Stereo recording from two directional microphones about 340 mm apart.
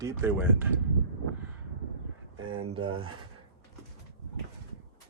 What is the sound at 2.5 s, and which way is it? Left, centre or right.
Speech, right.